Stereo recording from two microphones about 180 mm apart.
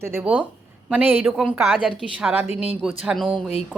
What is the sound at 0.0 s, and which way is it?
A woman's voice, 10° right (ahead or behind).